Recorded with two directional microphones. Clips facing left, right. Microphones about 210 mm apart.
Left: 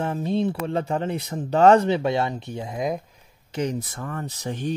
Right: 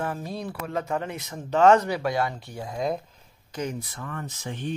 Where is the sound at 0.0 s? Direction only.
25° left (ahead or behind).